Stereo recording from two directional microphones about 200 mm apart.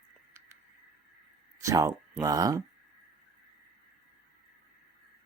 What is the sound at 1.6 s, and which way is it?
Speech, 15° right (ahead or behind).